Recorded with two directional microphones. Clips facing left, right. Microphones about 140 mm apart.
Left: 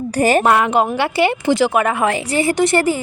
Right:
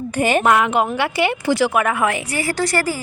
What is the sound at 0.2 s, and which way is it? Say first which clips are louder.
A woman's voice: left 2 dB; 40° left (ahead or behind).